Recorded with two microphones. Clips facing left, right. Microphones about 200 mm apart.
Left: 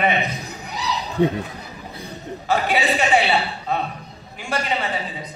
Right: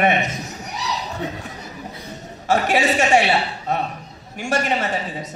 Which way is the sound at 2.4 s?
45° right (ahead or behind).